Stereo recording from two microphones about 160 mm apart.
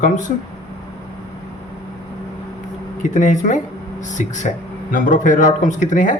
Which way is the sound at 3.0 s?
50° left (ahead or behind).